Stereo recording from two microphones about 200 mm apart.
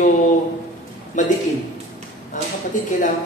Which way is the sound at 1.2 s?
40° left (ahead or behind).